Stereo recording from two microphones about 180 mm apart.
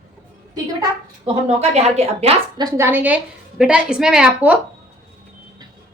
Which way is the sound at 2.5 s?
20° right (ahead or behind).